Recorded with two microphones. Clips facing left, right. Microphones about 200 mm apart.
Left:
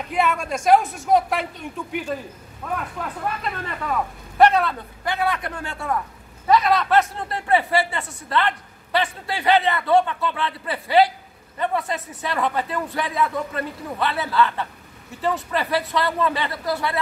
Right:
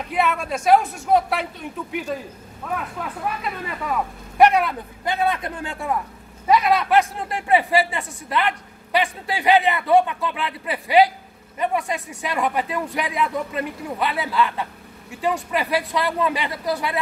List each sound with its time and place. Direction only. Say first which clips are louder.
0.0 s speech: even; centre (ahead or behind); by 17.0 s 15° right (ahead or behind)